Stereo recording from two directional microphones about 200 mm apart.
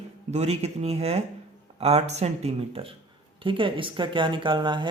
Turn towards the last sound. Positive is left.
turn(degrees=-25)  # may be behind; listen again after turning